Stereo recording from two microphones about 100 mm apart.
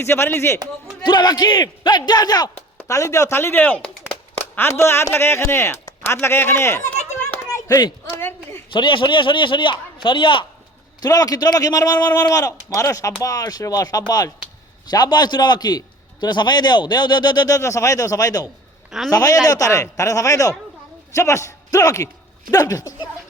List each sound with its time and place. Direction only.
0.0 s speech: 25° left (ahead or behind)
1.0 s speech: 45° left (ahead or behind)
2.7 s speech: 30° left (ahead or behind)
8.7 s a man's voice: 55° left (ahead or behind)
11.0 s a man's voice: 40° left (ahead or behind)
18.9 s a man's voice: 5° right (ahead or behind)
19.1 s a man's voice: 40° left (ahead or behind)